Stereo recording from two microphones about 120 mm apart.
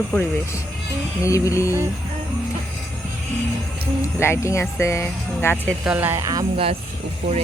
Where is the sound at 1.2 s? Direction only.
25° left (ahead or behind).